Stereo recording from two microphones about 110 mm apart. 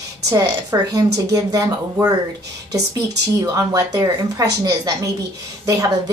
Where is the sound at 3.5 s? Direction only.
35° right (ahead or behind).